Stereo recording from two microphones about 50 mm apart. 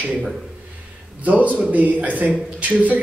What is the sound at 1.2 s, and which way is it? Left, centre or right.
A man's voice, right.